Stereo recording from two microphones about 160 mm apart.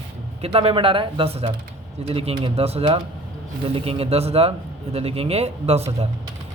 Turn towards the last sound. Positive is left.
turn(degrees=-40)  # may be behind; listen again after turning